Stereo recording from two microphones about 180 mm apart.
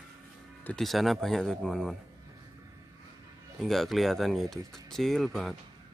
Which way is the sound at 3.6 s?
Centre (ahead or behind).